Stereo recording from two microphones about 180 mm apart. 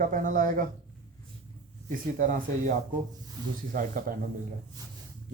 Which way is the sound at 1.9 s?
45° right (ahead or behind).